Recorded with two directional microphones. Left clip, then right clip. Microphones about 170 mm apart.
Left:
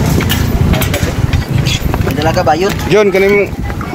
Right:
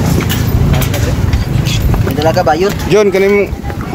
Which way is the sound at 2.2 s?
40° right (ahead or behind).